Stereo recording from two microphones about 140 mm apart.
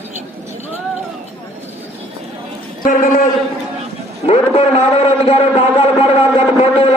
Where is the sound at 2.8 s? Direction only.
85° left.